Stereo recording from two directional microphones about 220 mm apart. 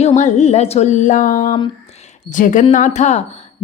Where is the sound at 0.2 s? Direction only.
30° left (ahead or behind).